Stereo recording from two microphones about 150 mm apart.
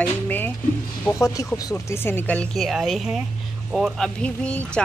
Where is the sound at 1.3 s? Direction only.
25° left (ahead or behind).